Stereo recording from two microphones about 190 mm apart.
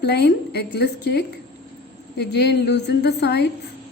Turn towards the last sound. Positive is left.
turn(degrees=60)  # may be behind; listen again after turning